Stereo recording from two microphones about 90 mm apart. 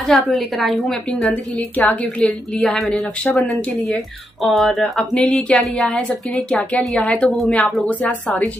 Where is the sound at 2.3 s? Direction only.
5° left (ahead or behind).